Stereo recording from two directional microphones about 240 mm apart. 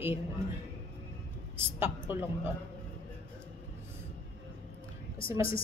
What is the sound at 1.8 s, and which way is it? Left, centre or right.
Speech, centre.